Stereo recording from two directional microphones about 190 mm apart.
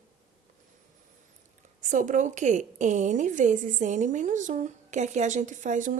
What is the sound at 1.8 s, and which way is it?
A woman's voice, 40° right (ahead or behind).